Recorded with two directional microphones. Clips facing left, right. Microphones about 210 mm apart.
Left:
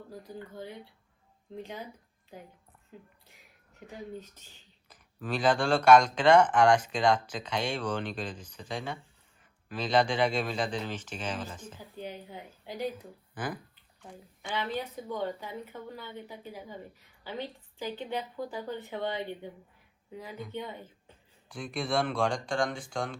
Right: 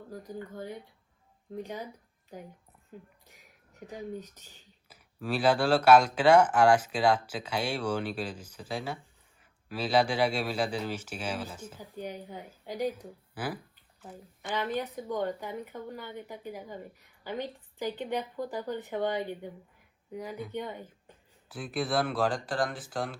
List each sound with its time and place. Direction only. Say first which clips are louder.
1.5 s speech: right 3 dB; 15° right (ahead or behind)
3.8 s speech: right 3 dB; 15° right (ahead or behind)
14.5 s speech: right 2 dB; 15° right (ahead or behind)
21.5 s speech: right 1 dB; 5° right (ahead or behind)